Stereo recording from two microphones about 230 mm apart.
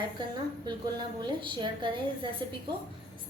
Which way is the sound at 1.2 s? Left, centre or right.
Right.